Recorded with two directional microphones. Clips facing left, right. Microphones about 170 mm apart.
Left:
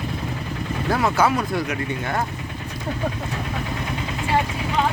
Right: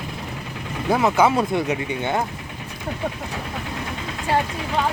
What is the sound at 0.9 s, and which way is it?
Speech, 20° right (ahead or behind).